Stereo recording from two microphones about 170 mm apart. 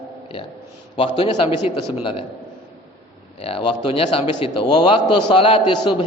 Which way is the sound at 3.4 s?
35° left (ahead or behind).